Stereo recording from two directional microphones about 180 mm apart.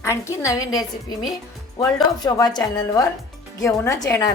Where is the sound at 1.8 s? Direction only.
20° left (ahead or behind).